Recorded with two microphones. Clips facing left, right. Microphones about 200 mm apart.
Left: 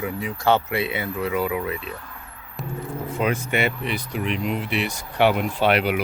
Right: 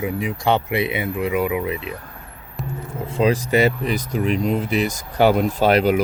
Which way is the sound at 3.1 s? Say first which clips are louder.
Right 6 dB; 30° right (ahead or behind).